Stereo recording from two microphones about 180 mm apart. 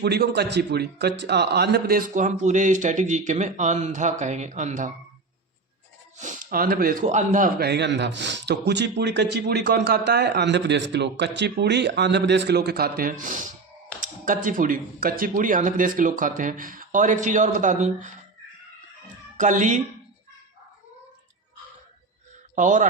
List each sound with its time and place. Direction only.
0.0 s a man's voice: 65° right (ahead or behind); by 4.9 s 45° right (ahead or behind)
6.1 s a man's voice: 45° right (ahead or behind)
7.6 s a man's voice: 70° right (ahead or behind); by 18.1 s 40° right (ahead or behind)
19.4 s a man's voice: 45° right (ahead or behind)
22.5 s a man's voice: 45° right (ahead or behind)